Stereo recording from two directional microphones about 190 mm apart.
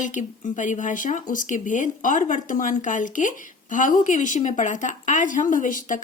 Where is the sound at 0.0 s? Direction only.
40° left (ahead or behind).